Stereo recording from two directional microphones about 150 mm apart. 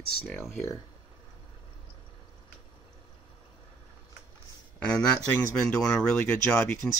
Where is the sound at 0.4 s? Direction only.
20° left (ahead or behind).